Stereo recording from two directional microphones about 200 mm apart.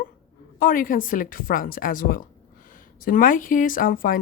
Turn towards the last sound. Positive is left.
turn(degrees=45)  # may be behind; listen again after turning